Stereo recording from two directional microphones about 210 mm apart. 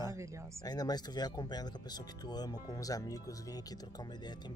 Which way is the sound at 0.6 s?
20° left (ahead or behind).